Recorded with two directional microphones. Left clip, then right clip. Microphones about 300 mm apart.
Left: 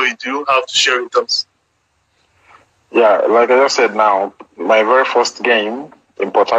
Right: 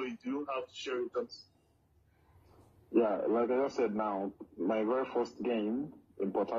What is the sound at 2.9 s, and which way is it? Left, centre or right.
Speech, left.